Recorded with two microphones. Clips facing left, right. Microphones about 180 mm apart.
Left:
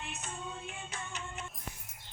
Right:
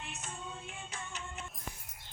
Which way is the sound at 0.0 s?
70° left (ahead or behind).